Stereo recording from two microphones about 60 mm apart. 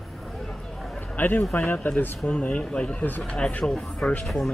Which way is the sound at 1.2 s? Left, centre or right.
Left.